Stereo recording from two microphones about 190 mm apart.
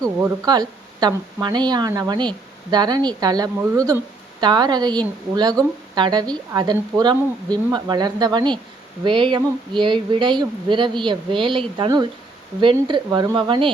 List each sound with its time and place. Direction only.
0.0 s speech: 20° right (ahead or behind)